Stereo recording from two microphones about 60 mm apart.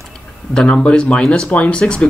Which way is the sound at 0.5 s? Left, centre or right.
Centre.